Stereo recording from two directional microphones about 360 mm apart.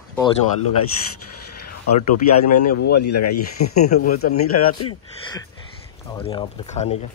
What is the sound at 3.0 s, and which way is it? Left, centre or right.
Speech, left.